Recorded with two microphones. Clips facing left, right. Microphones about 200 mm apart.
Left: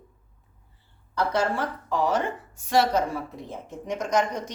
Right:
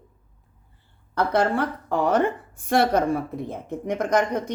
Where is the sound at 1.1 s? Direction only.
55° right (ahead or behind).